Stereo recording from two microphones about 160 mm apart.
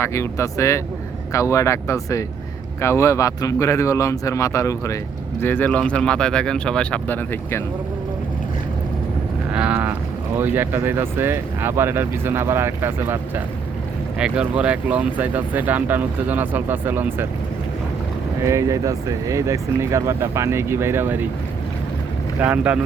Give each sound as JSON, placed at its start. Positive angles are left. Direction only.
{"t": 0.0, "sound": "speech", "side_deg": 15}
{"t": 9.5, "sound": "boat", "side_deg": -5}
{"t": 10.3, "sound": "speech", "side_deg": -10}
{"t": 18.4, "sound": "speech", "side_deg": -20}
{"t": 22.4, "sound": "speech", "side_deg": -10}